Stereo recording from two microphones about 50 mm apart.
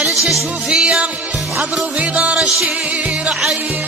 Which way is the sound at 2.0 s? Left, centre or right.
Right.